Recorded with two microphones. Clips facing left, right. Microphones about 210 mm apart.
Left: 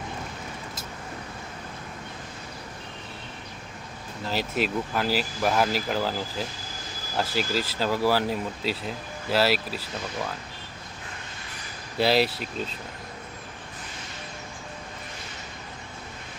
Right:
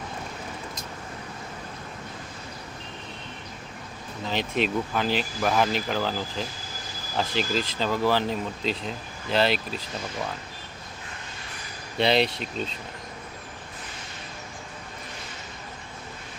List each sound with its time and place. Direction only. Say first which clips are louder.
4.3 s speech: right 1 dB; 5° left (ahead or behind)
7.2 s speech: even; 5° left (ahead or behind)
11.9 s speech: even; 5° left (ahead or behind)